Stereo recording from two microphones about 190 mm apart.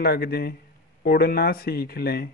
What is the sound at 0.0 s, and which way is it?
A man's voice, 55° left (ahead or behind).